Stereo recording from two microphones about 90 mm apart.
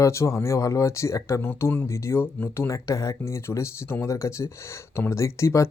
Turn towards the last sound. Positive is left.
turn(degrees=35)  # may be behind; listen again after turning